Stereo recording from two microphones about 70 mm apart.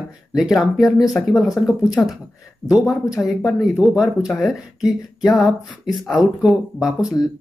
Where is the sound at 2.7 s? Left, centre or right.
Centre.